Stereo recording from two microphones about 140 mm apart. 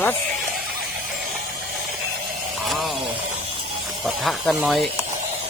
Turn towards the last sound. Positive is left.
turn(degrees=0)  # may be behind; listen again after turning